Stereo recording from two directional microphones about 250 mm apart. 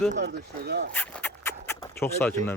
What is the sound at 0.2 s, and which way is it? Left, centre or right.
Speech, right.